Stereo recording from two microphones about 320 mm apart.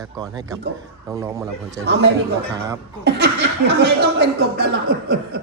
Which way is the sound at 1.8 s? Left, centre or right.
Right.